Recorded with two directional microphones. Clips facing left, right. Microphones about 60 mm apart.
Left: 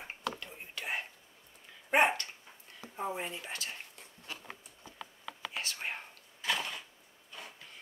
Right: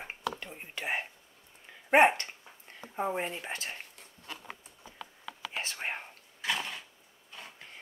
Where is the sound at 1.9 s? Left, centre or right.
Right.